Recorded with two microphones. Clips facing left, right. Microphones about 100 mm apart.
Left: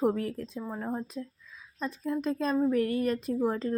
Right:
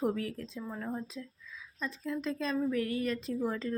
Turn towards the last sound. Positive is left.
turn(degrees=45)  # may be behind; listen again after turning